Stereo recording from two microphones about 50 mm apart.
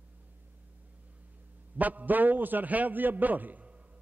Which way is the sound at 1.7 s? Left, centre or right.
Right.